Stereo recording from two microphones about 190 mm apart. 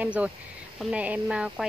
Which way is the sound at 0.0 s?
5° right (ahead or behind).